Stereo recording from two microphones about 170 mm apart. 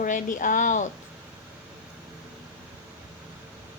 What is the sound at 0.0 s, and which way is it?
Speech, 50° left (ahead or behind).